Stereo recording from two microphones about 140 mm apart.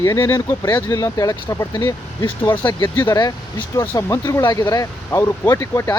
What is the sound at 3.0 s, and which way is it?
Speech, 30° left (ahead or behind).